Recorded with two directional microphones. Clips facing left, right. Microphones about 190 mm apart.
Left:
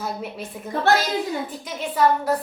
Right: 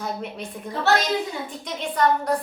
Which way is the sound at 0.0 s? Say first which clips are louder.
Even; 5° left (ahead or behind).